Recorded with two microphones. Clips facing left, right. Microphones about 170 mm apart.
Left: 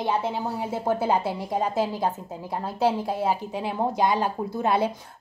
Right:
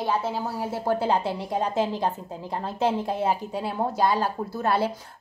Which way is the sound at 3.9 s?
15° left (ahead or behind).